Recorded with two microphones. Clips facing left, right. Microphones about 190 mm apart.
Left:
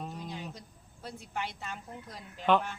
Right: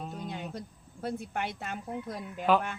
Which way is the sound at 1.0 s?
55° right (ahead or behind).